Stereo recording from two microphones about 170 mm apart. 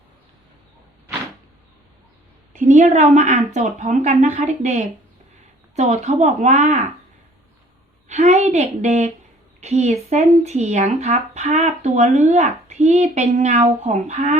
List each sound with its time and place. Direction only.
2.6 s speech: 45° right (ahead or behind)
8.0 s a woman's voice: 40° right (ahead or behind)